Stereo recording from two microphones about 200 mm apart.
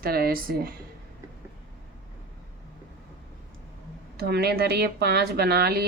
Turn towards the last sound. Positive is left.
turn(degrees=-50)  # may be behind; listen again after turning